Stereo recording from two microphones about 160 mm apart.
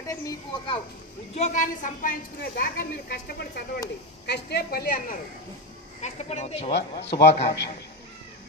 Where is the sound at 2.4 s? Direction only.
80° left.